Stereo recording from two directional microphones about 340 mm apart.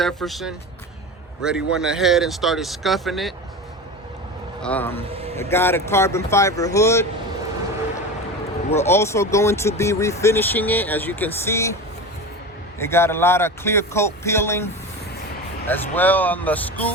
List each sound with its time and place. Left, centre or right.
0.0 s speech: centre
4.6 s speech: centre
5.1 s vehicle: centre
5.4 s speech: centre
8.8 s speech: centre
12.8 s speech: centre